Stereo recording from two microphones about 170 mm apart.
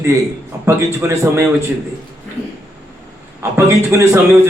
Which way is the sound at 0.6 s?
15° right (ahead or behind).